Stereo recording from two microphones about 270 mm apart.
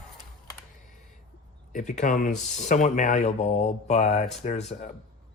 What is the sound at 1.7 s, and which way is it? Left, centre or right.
Speech, left.